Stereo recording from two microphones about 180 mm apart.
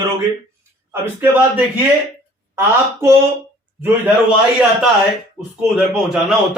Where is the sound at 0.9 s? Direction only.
10° right (ahead or behind).